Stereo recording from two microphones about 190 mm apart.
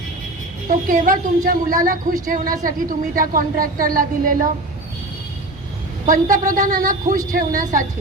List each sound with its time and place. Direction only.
0.9 s a woman's voice: 45° right (ahead or behind)
6.1 s a woman's voice: 45° right (ahead or behind)